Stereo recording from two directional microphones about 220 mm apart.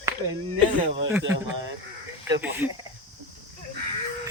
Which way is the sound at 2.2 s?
10° right (ahead or behind).